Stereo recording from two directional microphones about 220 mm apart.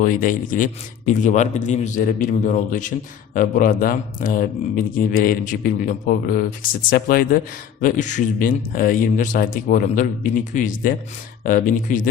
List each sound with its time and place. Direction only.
0.0 s speech: 35° left (ahead or behind)